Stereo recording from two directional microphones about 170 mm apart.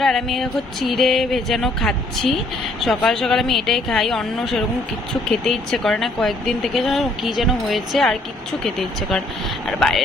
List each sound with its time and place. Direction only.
0.0 s speech: centre (ahead or behind)